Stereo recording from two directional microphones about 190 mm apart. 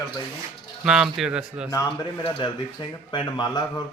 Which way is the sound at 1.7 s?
20° left (ahead or behind).